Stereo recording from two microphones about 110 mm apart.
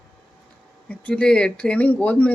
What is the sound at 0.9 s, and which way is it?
Speech, 10° left (ahead or behind).